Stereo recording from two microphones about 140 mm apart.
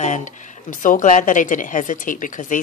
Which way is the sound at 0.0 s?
60° left (ahead or behind).